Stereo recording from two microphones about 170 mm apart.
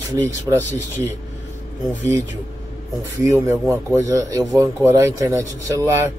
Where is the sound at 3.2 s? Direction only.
15° right (ahead or behind).